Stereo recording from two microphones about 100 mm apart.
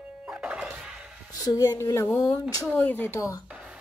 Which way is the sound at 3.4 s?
10° right (ahead or behind).